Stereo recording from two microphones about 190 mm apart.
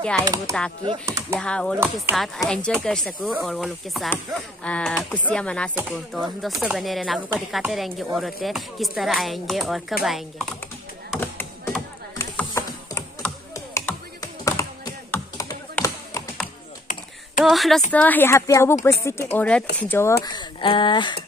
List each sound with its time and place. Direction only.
0.5 s speech: 5° left (ahead or behind)
1.0 s speech: 15° right (ahead or behind)
1.4 s speech: 5° left (ahead or behind)
5.8 s speech: 5° right (ahead or behind)
11.1 s a sound: 10° left (ahead or behind)
13.7 s computer keyboard: 15° left (ahead or behind)
15.7 s tap: 15° left (ahead or behind)
17.5 s a woman's voice: centre (ahead or behind)
20.2 s speech: 25° left (ahead or behind)